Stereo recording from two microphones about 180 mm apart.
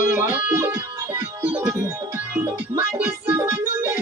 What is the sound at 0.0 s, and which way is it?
Music, 10° right (ahead or behind).